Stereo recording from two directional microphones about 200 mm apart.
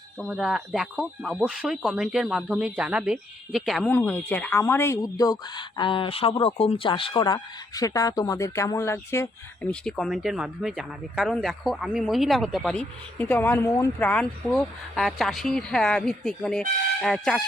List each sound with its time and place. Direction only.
0.2 s speech: centre (ahead or behind)